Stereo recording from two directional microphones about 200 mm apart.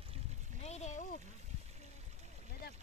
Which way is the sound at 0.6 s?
35° left (ahead or behind).